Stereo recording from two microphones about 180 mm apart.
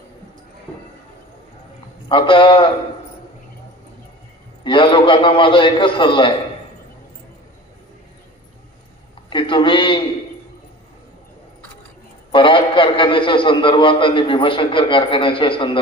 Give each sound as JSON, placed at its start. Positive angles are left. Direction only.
{"t": 2.0, "sound": "a man's voice", "side_deg": 30}
{"t": 4.6, "sound": "a man's voice", "side_deg": 25}
{"t": 9.3, "sound": "a sound", "side_deg": 25}
{"t": 12.3, "sound": "a man's voice", "side_deg": 30}